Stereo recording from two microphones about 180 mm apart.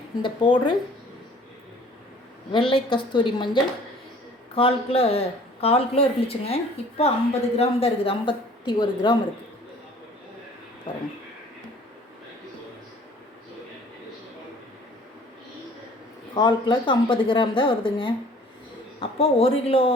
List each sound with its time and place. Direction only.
0.2 s a woman's voice: 25° left (ahead or behind)
2.5 s a woman's voice: 30° left (ahead or behind)
16.3 s a woman's voice: 25° left (ahead or behind)